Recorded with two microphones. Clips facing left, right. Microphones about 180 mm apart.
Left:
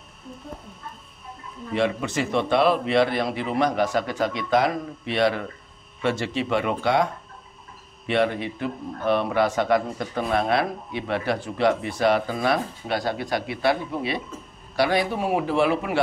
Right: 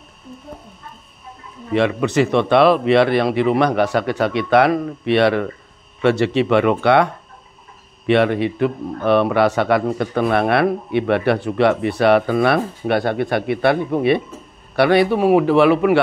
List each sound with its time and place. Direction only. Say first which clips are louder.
1.7 s a man's voice: right 6 dB; 75° right (ahead or behind)
8.1 s a man's voice: right 7 dB; 70° right (ahead or behind)